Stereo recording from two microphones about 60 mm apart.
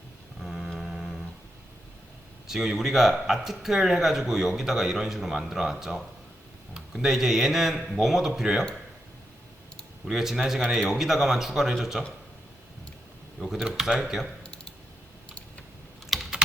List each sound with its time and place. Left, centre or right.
0.3 s a sound: centre
2.5 s speech: centre
10.1 s a man's voice: centre
13.5 s speech: centre
14.4 s typing: centre
16.1 s typing: centre